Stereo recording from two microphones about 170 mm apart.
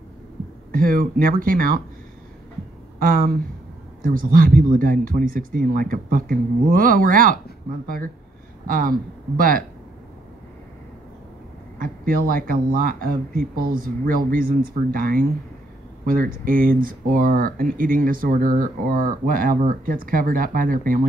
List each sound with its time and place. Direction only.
0.7 s speech: 55° right (ahead or behind)
3.0 s speech: 60° right (ahead or behind)
11.8 s speech: 55° right (ahead or behind)